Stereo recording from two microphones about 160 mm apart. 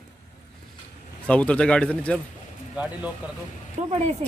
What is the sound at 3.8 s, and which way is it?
Speech, 45° right (ahead or behind).